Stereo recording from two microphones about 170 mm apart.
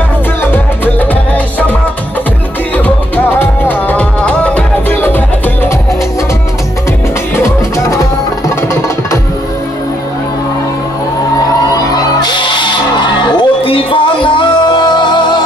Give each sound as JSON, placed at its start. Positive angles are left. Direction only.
{"t": 3.3, "sound": "music", "side_deg": 10}
{"t": 7.4, "sound": "music", "side_deg": 20}
{"t": 12.2, "sound": "music", "side_deg": 25}